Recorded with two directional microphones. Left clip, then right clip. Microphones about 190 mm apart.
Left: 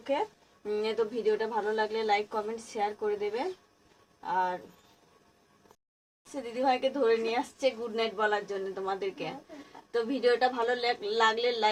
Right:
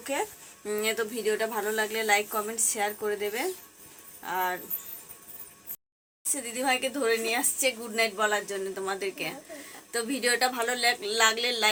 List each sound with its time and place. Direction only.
0.7 s a woman's voice: 20° right (ahead or behind)
6.3 s a woman's voice: 15° right (ahead or behind)